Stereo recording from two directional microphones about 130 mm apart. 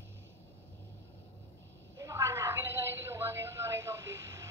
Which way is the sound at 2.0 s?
25° right (ahead or behind).